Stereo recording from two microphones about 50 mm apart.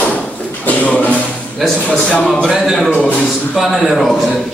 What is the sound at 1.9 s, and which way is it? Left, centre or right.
Speech, left.